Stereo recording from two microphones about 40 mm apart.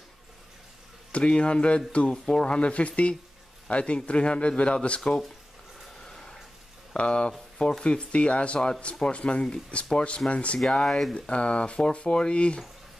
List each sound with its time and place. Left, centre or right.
1.1 s speech: left
6.0 s a sound: centre
6.9 s speech: left
10.7 s speech: centre